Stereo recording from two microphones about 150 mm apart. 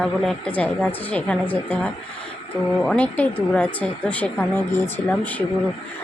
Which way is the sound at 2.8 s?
10° left (ahead or behind).